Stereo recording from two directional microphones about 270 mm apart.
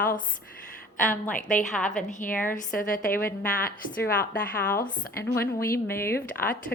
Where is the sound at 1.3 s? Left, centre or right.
Left.